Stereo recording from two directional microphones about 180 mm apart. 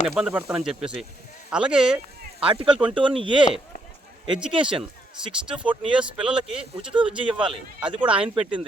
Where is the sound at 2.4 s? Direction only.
30° right (ahead or behind).